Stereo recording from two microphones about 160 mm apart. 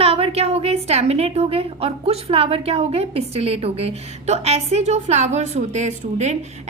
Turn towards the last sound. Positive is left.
turn(degrees=-45)  # may be behind; listen again after turning